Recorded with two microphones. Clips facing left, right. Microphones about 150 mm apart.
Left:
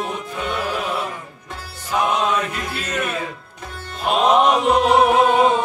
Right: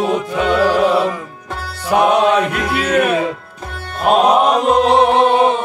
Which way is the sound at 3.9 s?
55° right (ahead or behind).